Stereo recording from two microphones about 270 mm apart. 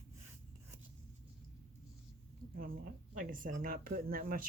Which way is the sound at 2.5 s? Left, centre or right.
Right.